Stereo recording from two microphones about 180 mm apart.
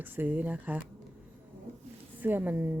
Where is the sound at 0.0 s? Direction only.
10° right (ahead or behind).